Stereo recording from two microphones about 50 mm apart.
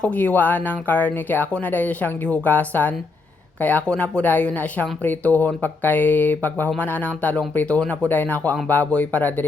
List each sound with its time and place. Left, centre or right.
0.1 s speech: left
3.8 s speech: left